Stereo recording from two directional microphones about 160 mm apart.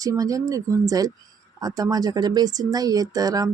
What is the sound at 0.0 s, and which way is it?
Speech, 20° right (ahead or behind).